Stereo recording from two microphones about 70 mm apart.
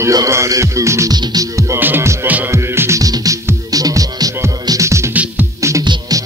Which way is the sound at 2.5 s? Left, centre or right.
Right.